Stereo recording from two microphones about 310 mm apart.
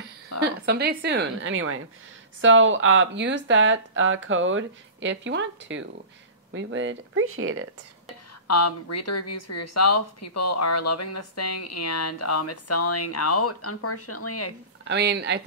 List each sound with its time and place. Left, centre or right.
0.3 s a sound: left
0.7 s speech: right
8.5 s speech: left
14.9 s speech: right